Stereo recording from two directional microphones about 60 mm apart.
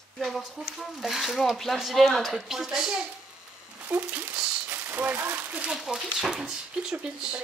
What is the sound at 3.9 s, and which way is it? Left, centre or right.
Speech, right.